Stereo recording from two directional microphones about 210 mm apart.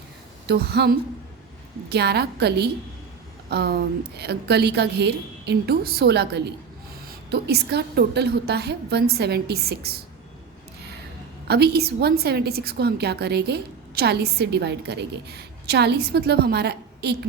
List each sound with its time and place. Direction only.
0.4 s a woman's voice: 50° right (ahead or behind)
11.4 s a woman's voice: 50° right (ahead or behind)